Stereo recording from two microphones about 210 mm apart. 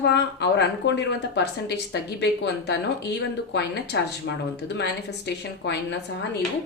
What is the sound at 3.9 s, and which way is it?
A woman's voice, 55° left (ahead or behind).